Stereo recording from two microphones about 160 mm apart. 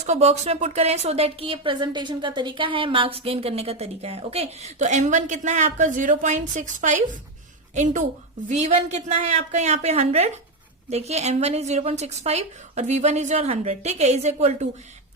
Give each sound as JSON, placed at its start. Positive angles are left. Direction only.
{"t": 0.0, "sound": "a woman's voice", "side_deg": -45}
{"t": 8.4, "sound": "a woman's voice", "side_deg": -45}